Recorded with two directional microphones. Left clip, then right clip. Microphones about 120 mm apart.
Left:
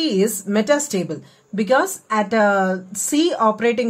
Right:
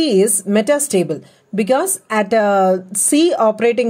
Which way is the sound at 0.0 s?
45° right (ahead or behind).